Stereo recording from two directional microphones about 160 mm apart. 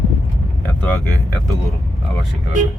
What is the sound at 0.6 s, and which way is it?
Speech, 10° left (ahead or behind).